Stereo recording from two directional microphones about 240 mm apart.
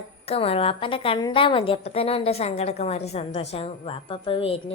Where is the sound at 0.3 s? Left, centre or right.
Left.